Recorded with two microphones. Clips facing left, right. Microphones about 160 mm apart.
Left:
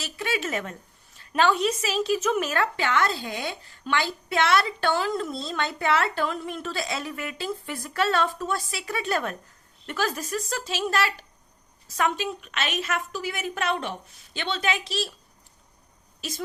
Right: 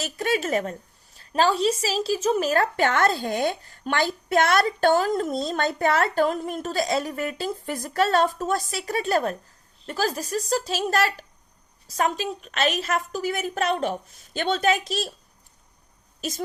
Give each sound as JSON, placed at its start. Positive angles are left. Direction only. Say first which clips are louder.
{"t": 0.0, "sound": "a woman's voice", "louder": "right 4 dB", "side_deg": -45}